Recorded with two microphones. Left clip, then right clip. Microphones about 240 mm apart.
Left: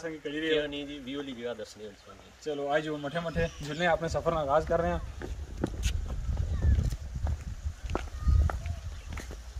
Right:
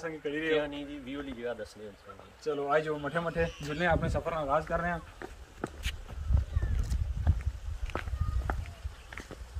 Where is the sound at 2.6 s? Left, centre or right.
Centre; by 5.7 s left.